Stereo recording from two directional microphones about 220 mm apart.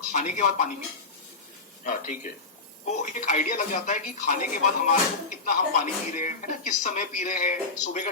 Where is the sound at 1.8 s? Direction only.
35° left (ahead or behind).